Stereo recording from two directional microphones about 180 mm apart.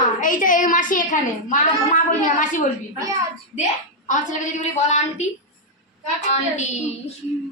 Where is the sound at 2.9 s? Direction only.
15° right (ahead or behind).